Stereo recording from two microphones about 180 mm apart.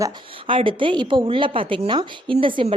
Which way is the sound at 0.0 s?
30° right (ahead or behind).